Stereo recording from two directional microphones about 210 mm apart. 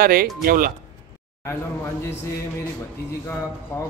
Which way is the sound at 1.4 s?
10° left (ahead or behind).